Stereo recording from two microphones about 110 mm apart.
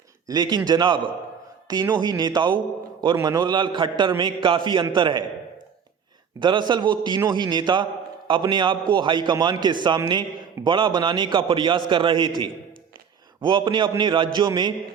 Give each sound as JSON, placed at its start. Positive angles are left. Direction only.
{"t": 0.3, "sound": "a man's voice", "side_deg": -40}
{"t": 6.4, "sound": "a man's voice", "side_deg": -45}
{"t": 13.4, "sound": "a man's voice", "side_deg": -45}